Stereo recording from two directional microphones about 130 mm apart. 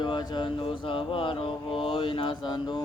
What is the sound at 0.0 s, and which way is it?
Mantra, 35° left (ahead or behind).